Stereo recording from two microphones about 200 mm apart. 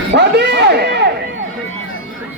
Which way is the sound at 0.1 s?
55° right (ahead or behind).